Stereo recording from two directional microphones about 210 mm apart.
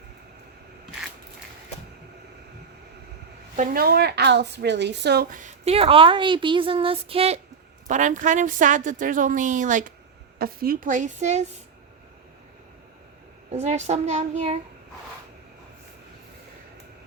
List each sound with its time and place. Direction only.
3.5 s a woman's voice: 40° right (ahead or behind)
13.5 s a woman's voice: 30° right (ahead or behind)